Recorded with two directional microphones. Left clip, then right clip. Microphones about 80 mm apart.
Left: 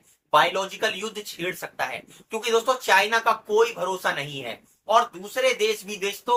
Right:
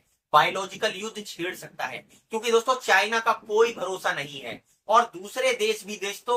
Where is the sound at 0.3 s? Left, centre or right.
Left.